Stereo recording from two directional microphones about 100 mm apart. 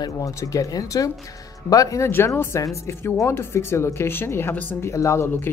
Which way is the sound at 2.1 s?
25° left (ahead or behind).